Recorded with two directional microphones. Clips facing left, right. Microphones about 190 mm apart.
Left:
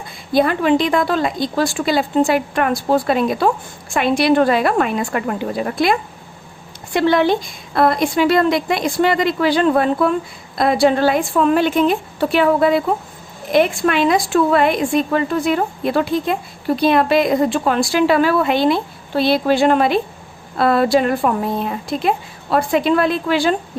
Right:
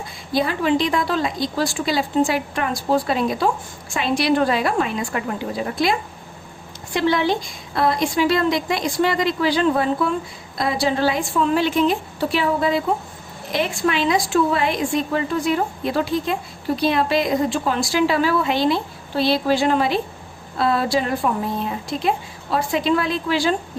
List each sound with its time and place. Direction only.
0.3 s a woman's voice: 55° left (ahead or behind)
6.9 s a woman's voice: 60° left (ahead or behind)